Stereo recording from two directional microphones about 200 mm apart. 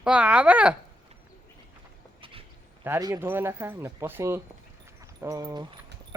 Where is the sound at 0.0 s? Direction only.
5° right (ahead or behind).